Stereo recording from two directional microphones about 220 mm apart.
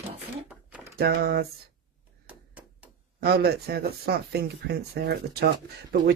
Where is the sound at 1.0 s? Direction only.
45° right (ahead or behind).